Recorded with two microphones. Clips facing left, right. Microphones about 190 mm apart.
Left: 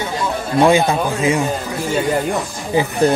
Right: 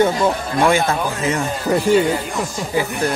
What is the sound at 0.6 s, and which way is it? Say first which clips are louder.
Speech: left 5 dB; 15° left (ahead or behind).